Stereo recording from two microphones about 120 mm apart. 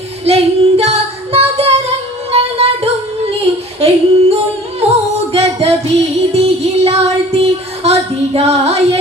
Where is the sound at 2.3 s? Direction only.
55° right (ahead or behind).